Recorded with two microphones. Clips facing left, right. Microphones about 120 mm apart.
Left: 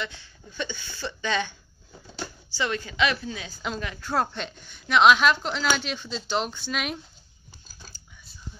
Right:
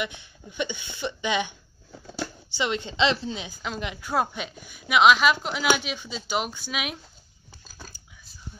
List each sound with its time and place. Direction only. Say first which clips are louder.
0.0 s a woman's voice: right 3 dB; 15° right (ahead or behind)
2.5 s a woman's voice: right 1 dB; 20° right (ahead or behind); by 7.0 s 5° right (ahead or behind)